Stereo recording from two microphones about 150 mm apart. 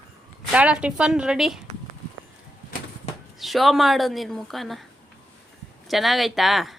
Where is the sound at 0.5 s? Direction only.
10° right (ahead or behind).